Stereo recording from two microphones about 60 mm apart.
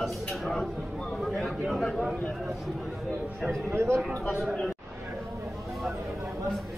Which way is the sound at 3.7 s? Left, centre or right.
Right.